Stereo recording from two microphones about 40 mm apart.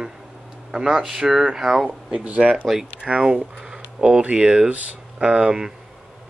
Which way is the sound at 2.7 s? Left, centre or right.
Centre.